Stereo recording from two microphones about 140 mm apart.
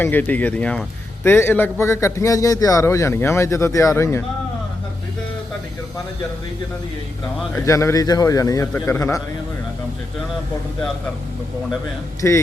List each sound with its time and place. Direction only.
0.0 s a man's voice: 15° left (ahead or behind)
7.5 s a man's voice: 20° left (ahead or behind)
12.2 s a man's voice: 15° left (ahead or behind)